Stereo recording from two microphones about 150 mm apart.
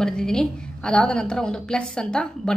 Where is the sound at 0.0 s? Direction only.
5° left (ahead or behind).